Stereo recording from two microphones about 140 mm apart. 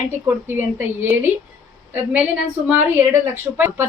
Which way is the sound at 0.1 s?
15° right (ahead or behind).